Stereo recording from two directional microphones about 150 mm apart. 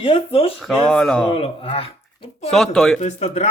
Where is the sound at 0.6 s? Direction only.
Centre (ahead or behind).